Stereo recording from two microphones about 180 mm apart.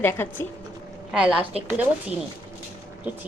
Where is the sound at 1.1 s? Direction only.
5° right (ahead or behind).